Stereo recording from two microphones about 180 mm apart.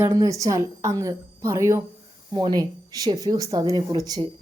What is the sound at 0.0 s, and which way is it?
A woman's voice, 20° right (ahead or behind).